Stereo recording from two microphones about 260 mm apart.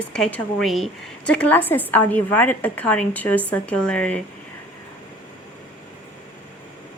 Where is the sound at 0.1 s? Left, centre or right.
Centre.